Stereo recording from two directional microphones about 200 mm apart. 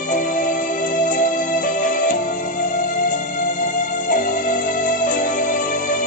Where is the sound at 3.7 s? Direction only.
40° left (ahead or behind).